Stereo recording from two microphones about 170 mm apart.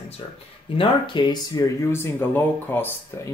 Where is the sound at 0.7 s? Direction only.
30° left (ahead or behind).